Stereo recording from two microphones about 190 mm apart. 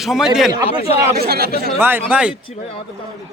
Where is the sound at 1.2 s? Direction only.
55° right (ahead or behind).